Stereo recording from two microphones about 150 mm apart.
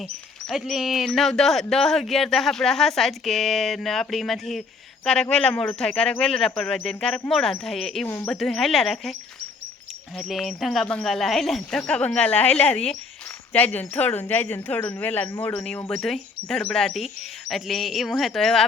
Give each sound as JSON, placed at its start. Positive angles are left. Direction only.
{"t": 0.4, "sound": "speech", "side_deg": 0}
{"t": 8.0, "sound": "speech", "side_deg": 15}
{"t": 8.3, "sound": "speech", "side_deg": 5}
{"t": 10.2, "sound": "speech", "side_deg": 0}